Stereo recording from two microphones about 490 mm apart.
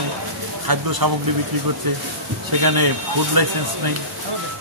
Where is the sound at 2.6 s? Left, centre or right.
Right.